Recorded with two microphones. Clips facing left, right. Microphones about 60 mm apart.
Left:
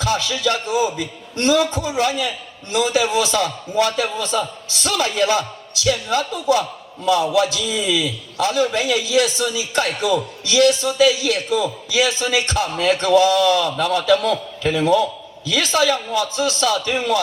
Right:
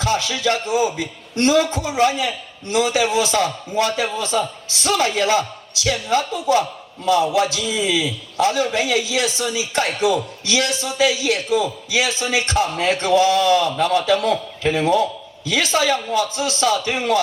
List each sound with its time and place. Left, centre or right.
0.0 s a man's voice: right